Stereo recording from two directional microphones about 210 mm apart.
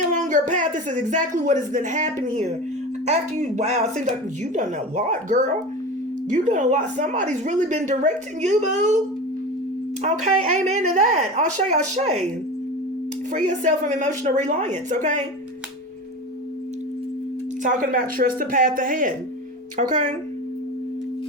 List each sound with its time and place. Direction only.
0.1 s a woman's voice: 35° right (ahead or behind)
10.0 s a woman's voice: 35° right (ahead or behind)
13.3 s a woman's voice: 35° right (ahead or behind)
17.6 s a woman's voice: 40° right (ahead or behind)